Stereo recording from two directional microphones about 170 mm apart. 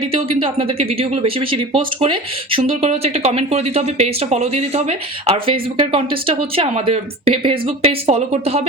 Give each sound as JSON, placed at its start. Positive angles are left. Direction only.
{"t": 0.0, "sound": "speech", "side_deg": -30}